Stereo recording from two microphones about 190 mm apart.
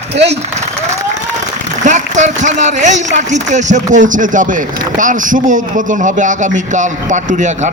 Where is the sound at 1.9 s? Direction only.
40° right (ahead or behind).